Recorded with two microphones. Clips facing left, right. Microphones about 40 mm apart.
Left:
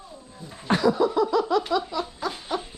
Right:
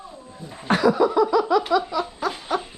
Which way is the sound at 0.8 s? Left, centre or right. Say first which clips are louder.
Right 4 dB; centre.